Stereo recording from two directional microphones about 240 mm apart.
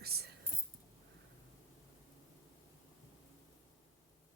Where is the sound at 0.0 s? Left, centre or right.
Right.